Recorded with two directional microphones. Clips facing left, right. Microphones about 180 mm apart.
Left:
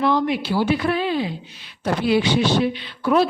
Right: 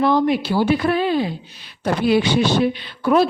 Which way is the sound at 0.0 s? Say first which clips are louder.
Right 3 dB; 40° right (ahead or behind).